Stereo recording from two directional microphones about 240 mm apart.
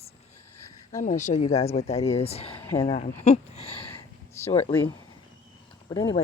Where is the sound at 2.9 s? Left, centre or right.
Left.